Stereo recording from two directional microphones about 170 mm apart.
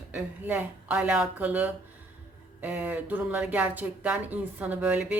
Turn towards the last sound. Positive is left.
turn(degrees=-10)  # may be behind; listen again after turning